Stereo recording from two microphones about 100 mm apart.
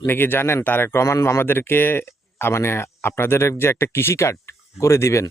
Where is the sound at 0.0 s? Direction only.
20° left (ahead or behind).